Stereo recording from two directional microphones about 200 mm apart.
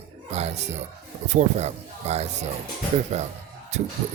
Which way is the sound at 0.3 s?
35° right (ahead or behind).